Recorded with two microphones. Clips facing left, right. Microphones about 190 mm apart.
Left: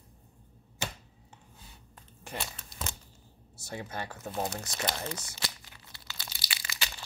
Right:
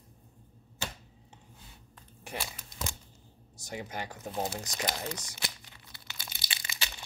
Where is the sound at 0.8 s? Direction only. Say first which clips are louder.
Left 2 dB; 15° left (ahead or behind).